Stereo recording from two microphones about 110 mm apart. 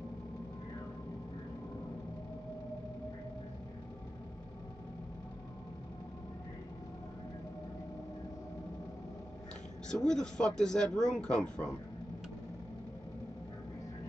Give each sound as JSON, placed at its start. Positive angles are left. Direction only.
{"t": 9.8, "sound": "speech", "side_deg": 5}